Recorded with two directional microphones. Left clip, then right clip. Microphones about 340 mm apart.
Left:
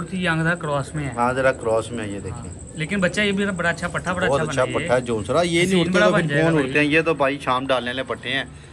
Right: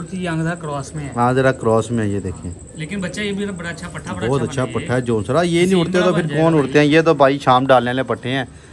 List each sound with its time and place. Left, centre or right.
0.1 s speech: centre
1.1 s a man's voice: right
2.9 s a man's voice: centre
6.6 s a man's voice: right